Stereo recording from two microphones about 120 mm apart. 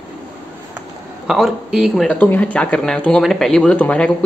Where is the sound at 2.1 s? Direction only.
15° left (ahead or behind).